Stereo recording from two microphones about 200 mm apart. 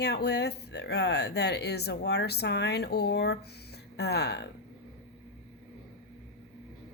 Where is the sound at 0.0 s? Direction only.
55° left (ahead or behind).